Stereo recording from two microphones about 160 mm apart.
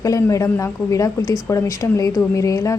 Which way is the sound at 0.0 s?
20° left (ahead or behind).